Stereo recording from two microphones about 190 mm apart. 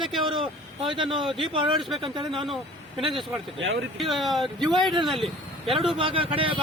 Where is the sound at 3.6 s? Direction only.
85° right.